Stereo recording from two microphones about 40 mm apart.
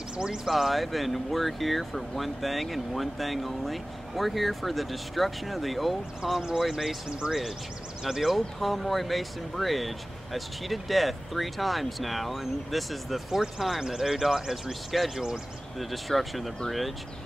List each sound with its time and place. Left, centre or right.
0.5 s speech: centre
7.1 s speech: right
8.0 s speech: centre